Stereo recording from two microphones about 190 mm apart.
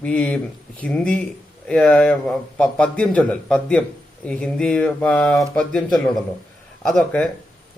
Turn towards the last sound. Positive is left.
turn(degrees=5)  # may be behind; listen again after turning